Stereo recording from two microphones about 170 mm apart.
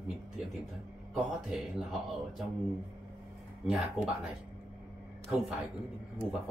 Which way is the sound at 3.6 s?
5° right (ahead or behind).